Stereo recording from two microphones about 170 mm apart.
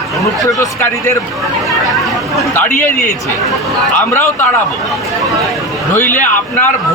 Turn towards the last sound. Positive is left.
turn(degrees=10)  # may be behind; listen again after turning